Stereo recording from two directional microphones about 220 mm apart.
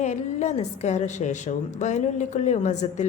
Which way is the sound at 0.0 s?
30° left (ahead or behind).